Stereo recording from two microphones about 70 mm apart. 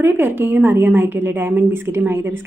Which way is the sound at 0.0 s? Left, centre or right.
Right.